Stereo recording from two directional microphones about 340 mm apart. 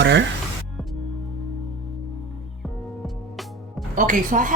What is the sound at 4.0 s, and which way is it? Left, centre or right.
Speech, right.